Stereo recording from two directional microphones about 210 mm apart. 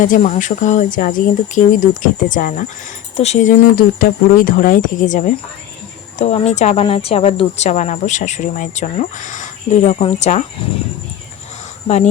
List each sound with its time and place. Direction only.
0.0 s a woman's voice: 35° left (ahead or behind)
11.9 s a woman's voice: 30° left (ahead or behind)